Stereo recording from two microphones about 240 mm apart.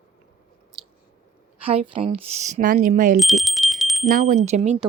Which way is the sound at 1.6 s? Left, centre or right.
Right.